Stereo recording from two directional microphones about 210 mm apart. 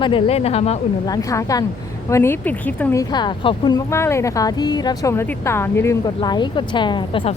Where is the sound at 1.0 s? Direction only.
15° left (ahead or behind).